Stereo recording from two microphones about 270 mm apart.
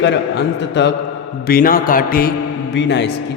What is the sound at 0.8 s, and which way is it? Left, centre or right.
Speech, left.